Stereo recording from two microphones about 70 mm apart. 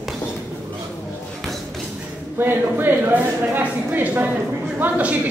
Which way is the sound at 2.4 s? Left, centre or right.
Right.